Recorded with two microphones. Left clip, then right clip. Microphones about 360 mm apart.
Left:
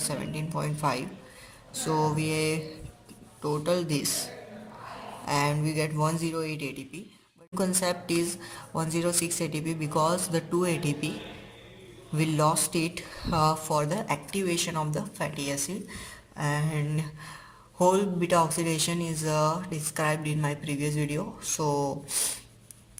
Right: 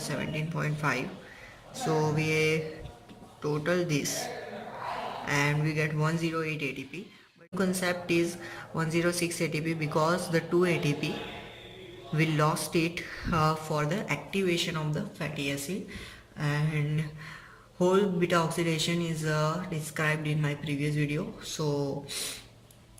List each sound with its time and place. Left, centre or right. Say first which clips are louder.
0.1 s speech: even; centre
5.2 s speech: left 2 dB; centre
12.1 s speech: left 2 dB; centre